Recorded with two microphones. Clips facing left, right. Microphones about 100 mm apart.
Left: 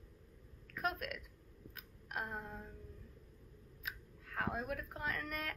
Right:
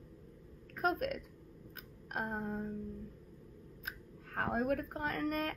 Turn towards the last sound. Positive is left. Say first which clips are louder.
# right 6 dB
turn(degrees=-40)  # may be behind; listen again after turning